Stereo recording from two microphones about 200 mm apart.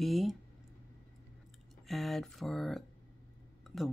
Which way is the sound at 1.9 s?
Centre (ahead or behind).